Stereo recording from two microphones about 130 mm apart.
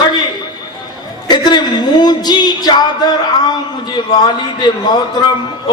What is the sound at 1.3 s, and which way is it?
A man's voice, 35° left (ahead or behind).